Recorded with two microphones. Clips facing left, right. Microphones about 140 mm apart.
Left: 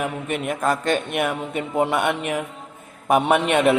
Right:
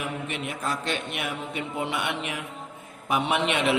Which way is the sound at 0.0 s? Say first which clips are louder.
Left 6 dB; 50° left (ahead or behind).